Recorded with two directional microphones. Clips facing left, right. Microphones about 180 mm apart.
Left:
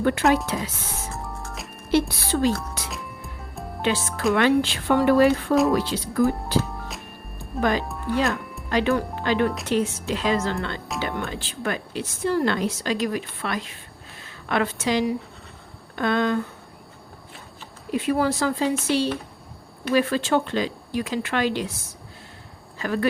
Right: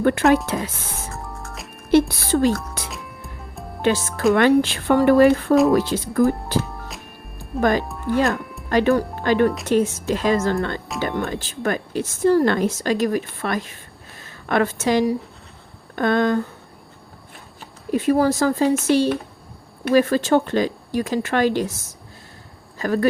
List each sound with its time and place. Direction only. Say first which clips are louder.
0.0 s speech: right 4 dB; 55° right (ahead or behind)
1.1 s music: even; centre (ahead or behind)
1.9 s speech: right 5 dB; 50° right (ahead or behind)
2.9 s music: even; centre (ahead or behind)
3.8 s speech: right 5 dB; 45° right (ahead or behind)
6.7 s music: even; centre (ahead or behind)
7.6 s speech: right 4 dB; 50° right (ahead or behind)
17.9 s speech: right 5 dB; 45° right (ahead or behind)
22.8 s speech: right 4 dB; 40° right (ahead or behind)